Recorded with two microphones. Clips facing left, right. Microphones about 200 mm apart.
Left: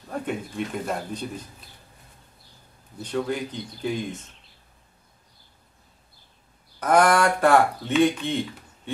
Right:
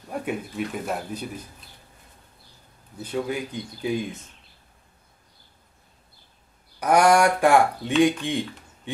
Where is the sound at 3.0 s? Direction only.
10° right (ahead or behind).